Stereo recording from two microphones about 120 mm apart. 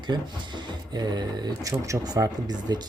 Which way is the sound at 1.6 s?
30° right (ahead or behind).